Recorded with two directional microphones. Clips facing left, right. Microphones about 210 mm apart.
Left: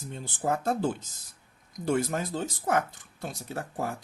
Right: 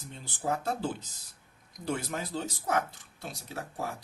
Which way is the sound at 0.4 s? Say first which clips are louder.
Left 4 dB; 50° left (ahead or behind).